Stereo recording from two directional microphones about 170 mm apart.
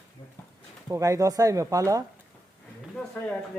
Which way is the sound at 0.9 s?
20° right (ahead or behind).